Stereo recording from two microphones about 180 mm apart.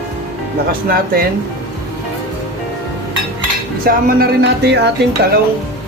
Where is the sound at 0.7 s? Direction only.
55° right (ahead or behind).